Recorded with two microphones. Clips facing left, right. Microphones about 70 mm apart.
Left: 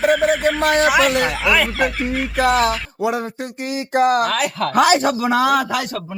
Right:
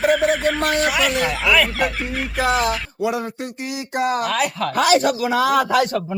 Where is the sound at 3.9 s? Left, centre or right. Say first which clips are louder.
Left 4 dB; left.